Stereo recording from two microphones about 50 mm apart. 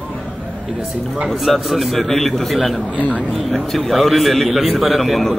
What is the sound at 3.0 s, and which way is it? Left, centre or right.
Speech, left.